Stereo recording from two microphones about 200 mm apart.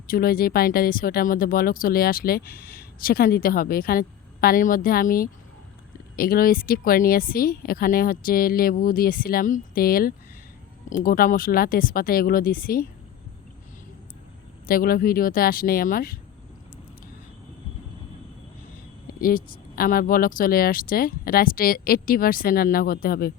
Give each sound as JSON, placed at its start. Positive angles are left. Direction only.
{"t": 0.1, "sound": "speech", "side_deg": 50}
{"t": 14.7, "sound": "speech", "side_deg": 45}
{"t": 19.2, "sound": "speech", "side_deg": 45}